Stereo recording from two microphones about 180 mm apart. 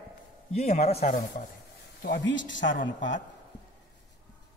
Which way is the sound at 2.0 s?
80° left.